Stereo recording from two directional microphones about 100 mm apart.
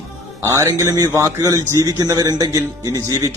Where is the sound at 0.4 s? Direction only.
30° right (ahead or behind).